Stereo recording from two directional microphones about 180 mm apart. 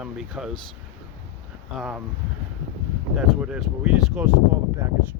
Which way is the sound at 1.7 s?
5° right (ahead or behind).